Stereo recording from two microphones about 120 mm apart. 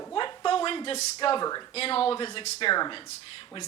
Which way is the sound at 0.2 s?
45° left (ahead or behind).